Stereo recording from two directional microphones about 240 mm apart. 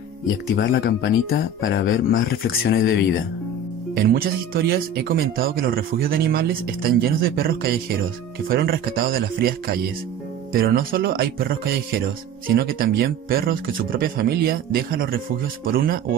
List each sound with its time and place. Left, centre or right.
0.6 s speech: left
3.9 s speech: right